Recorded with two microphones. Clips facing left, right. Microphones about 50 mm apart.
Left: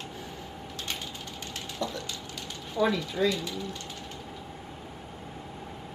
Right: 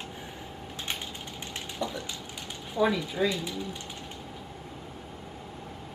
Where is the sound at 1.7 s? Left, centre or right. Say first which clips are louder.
Even; centre.